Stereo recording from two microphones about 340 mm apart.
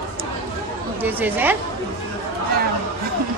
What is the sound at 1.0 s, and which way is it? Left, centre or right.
Speech, centre.